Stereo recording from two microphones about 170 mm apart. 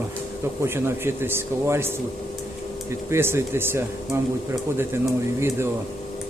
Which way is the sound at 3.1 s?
15° right (ahead or behind).